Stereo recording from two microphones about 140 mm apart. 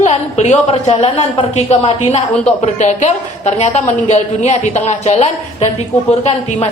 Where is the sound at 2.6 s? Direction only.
55° left (ahead or behind).